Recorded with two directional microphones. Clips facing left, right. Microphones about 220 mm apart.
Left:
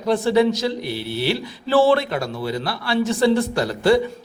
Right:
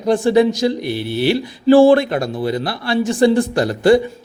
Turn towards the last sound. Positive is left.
turn(degrees=-15)  # may be behind; listen again after turning